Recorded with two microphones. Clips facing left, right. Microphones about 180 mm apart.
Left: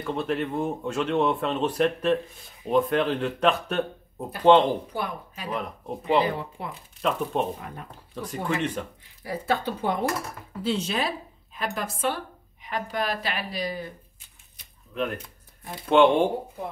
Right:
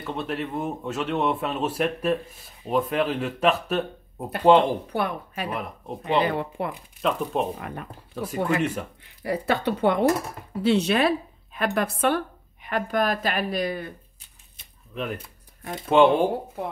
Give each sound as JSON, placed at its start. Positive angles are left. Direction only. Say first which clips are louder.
{"t": 0.0, "sound": "speech", "louder": "left 2 dB", "side_deg": 0}
{"t": 4.9, "sound": "speech", "louder": "right 5 dB", "side_deg": -65}
{"t": 5.5, "sound": "speech", "louder": "even", "side_deg": 0}
{"t": 6.2, "sound": "speech", "louder": "right 3 dB", "side_deg": -65}
{"t": 7.0, "sound": "speech", "louder": "right 1 dB", "side_deg": 0}
{"t": 9.0, "sound": "speech", "louder": "right 6 dB", "side_deg": -65}
{"t": 15.0, "sound": "speech", "louder": "left 2 dB", "side_deg": 0}